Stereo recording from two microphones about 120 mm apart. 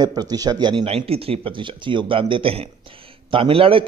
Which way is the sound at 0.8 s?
55° right (ahead or behind).